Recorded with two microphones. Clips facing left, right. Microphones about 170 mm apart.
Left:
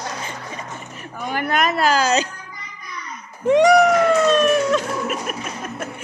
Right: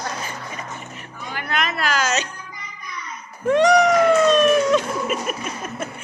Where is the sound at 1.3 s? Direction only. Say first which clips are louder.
Left 5 dB; 45° left (ahead or behind).